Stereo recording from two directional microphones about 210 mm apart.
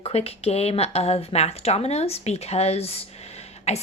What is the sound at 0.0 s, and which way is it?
A woman's voice, 30° left (ahead or behind).